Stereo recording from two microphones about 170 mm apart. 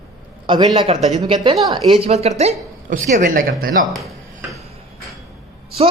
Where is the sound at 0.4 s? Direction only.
25° right (ahead or behind).